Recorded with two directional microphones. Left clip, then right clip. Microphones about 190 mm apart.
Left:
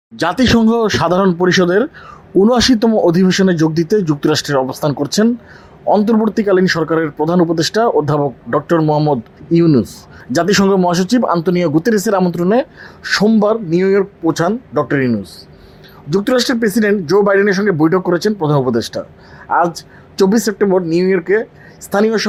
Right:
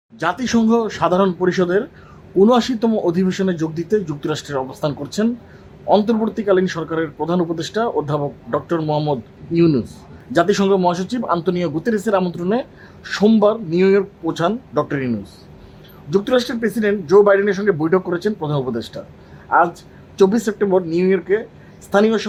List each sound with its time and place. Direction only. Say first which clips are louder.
0.2 s speech: left 6 dB; 40° left (ahead or behind)
6.1 s speech: left 4 dB; 30° left (ahead or behind)